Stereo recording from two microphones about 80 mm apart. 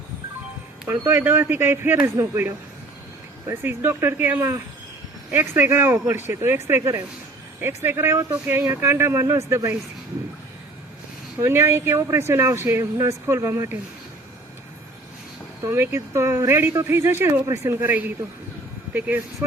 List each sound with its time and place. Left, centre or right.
0.9 s speech: right
11.3 s speech: right
15.6 s speech: right